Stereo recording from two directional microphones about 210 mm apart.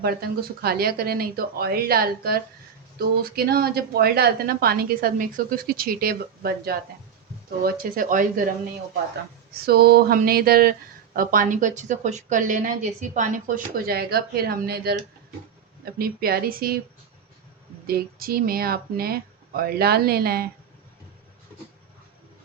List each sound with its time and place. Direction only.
0.0 s speech: 45° right (ahead or behind)
9.5 s speech: 50° right (ahead or behind)
17.8 s speech: 45° right (ahead or behind)